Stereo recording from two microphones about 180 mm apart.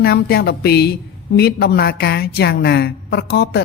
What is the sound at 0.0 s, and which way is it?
A woman's voice, 60° left (ahead or behind).